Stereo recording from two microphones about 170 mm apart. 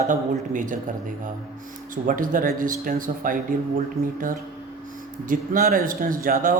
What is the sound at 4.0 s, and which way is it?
Speech, centre (ahead or behind).